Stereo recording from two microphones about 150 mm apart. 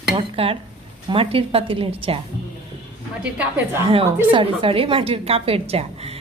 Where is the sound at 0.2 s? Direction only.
40° right (ahead or behind).